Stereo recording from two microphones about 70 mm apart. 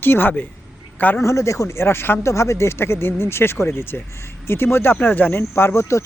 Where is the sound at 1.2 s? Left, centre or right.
Left.